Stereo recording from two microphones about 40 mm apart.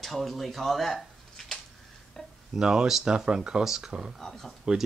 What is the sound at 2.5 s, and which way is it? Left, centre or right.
Speech, centre.